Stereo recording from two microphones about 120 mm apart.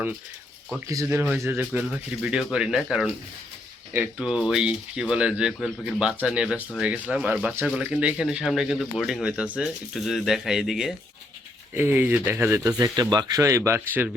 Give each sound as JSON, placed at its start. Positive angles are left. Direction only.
{"t": 0.9, "sound": "speech", "side_deg": -20}
{"t": 11.7, "sound": "speech", "side_deg": -20}
{"t": 12.6, "sound": "speech", "side_deg": -30}